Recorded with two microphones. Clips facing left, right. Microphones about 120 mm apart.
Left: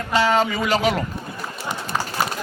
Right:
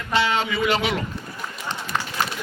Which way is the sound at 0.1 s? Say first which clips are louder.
Left 3 dB; 40° left (ahead or behind).